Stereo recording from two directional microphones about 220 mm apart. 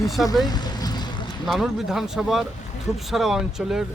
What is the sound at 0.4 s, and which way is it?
Vehicle, 20° left (ahead or behind).